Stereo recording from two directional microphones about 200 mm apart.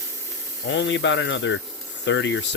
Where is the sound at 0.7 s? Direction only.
65° left (ahead or behind).